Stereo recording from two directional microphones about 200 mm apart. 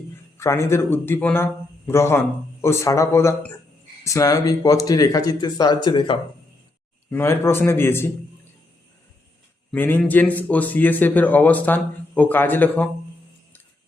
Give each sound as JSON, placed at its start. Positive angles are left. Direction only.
{"t": 0.3, "sound": "speech", "side_deg": 15}
{"t": 7.1, "sound": "speech", "side_deg": 10}
{"t": 9.7, "sound": "speech", "side_deg": 10}